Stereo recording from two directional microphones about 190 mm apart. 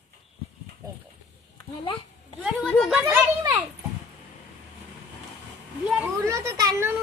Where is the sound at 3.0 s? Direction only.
15° right (ahead or behind).